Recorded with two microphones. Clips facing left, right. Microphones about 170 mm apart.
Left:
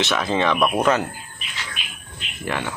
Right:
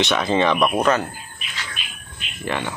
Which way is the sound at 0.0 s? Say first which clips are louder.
Right 2 dB; centre (ahead or behind).